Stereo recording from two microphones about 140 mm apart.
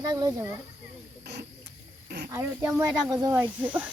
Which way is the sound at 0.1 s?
30° right (ahead or behind).